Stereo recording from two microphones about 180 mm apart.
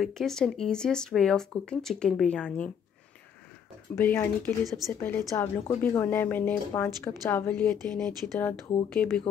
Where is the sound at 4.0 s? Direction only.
10° left (ahead or behind).